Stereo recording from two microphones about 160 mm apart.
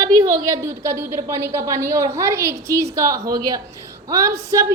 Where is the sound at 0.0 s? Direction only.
20° right (ahead or behind).